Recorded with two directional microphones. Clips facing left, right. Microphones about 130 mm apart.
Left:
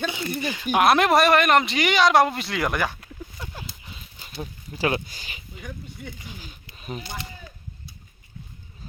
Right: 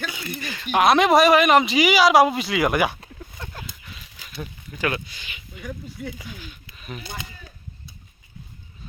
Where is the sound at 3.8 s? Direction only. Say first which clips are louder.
Even; 30° left (ahead or behind).